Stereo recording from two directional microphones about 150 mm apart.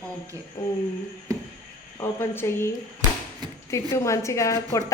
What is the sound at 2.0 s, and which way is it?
A woman's voice, 15° left (ahead or behind).